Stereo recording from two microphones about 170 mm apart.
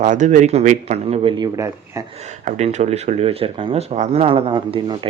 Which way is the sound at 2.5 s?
40° right (ahead or behind).